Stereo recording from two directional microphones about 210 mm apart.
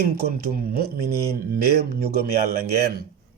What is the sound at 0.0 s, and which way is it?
Speech, 45° right (ahead or behind).